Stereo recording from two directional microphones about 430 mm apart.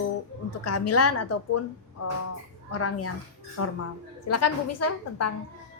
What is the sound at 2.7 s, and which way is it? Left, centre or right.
A woman's voice, left.